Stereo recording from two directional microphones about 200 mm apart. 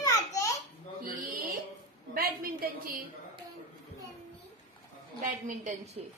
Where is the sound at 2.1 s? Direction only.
45° right (ahead or behind).